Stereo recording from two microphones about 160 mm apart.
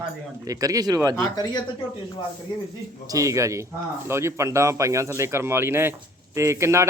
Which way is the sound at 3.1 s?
20° right (ahead or behind).